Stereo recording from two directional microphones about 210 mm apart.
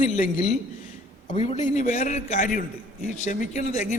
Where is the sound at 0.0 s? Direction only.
40° left (ahead or behind).